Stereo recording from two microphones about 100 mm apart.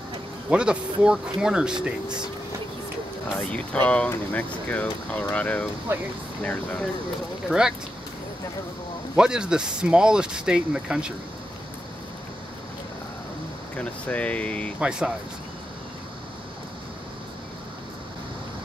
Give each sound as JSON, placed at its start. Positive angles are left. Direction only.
{"t": 0.5, "sound": "speech", "side_deg": -10}
{"t": 3.5, "sound": "speech", "side_deg": 15}
{"t": 7.4, "sound": "speech", "side_deg": -5}
{"t": 9.1, "sound": "speech", "side_deg": -10}
{"t": 13.7, "sound": "speech", "side_deg": 10}
{"t": 14.8, "sound": "speech", "side_deg": -10}